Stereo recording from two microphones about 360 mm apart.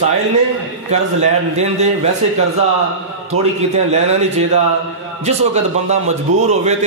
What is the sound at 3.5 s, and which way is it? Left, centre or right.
Speech, centre.